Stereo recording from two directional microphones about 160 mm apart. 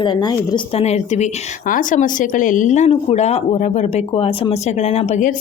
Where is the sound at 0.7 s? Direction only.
40° left (ahead or behind).